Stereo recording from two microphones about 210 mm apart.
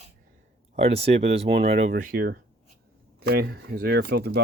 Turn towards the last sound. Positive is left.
turn(degrees=-50)  # may be behind; listen again after turning